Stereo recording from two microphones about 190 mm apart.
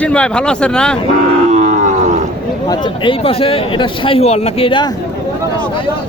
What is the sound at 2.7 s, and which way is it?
A man's voice, 25° left (ahead or behind).